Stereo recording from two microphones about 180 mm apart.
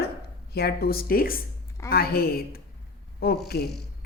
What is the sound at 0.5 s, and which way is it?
Speech, 60° left (ahead or behind).